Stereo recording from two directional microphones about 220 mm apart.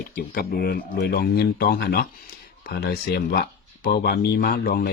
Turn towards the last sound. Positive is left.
turn(degrees=40)  # may be behind; listen again after turning